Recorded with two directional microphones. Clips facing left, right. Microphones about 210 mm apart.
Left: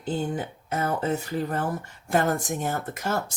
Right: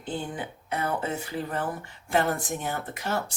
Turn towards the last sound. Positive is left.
turn(degrees=45)  # may be behind; listen again after turning